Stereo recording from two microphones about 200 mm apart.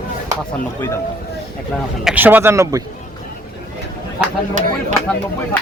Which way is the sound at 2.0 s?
10° right (ahead or behind).